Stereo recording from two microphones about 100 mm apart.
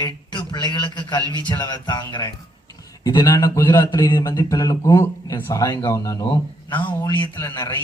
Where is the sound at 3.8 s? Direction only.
40° left (ahead or behind).